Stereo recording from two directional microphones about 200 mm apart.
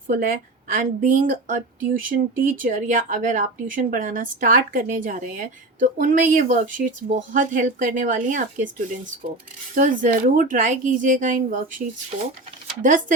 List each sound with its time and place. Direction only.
0.1 s speech: 40° right (ahead or behind)
12.8 s speech: 40° right (ahead or behind)